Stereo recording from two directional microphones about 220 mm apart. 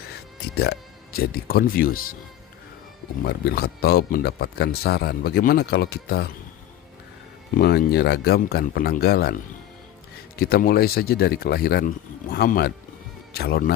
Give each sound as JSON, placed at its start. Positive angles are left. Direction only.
{"t": 0.5, "sound": "speech", "side_deg": 45}
{"t": 3.2, "sound": "speech", "side_deg": 45}
{"t": 7.6, "sound": "speech", "side_deg": 45}
{"t": 10.3, "sound": "speech", "side_deg": 45}